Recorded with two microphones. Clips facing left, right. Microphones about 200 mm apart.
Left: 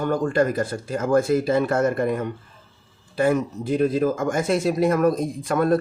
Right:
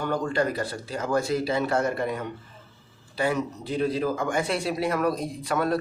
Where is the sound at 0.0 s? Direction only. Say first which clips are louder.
Left 5 dB; 50° left (ahead or behind).